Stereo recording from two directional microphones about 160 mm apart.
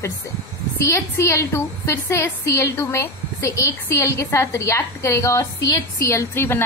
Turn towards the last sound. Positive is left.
turn(degrees=15)  # may be behind; listen again after turning